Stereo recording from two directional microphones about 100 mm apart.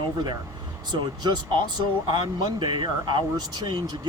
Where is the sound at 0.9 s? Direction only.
45° right (ahead or behind).